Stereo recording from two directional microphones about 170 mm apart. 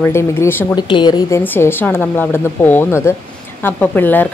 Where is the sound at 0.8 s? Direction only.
25° left (ahead or behind).